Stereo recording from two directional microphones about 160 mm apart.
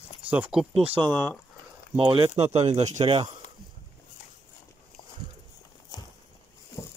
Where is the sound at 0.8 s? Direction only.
30° right (ahead or behind).